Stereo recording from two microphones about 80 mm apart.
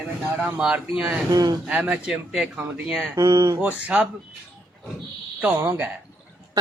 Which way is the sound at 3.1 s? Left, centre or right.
Right.